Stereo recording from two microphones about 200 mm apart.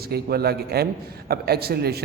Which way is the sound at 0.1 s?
50° right (ahead or behind).